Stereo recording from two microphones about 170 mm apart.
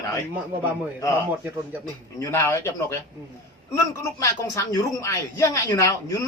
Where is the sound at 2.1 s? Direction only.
15° left (ahead or behind).